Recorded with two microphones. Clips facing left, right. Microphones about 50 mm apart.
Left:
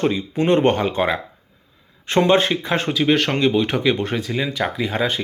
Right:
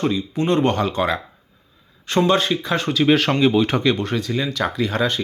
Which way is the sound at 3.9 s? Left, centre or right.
Left.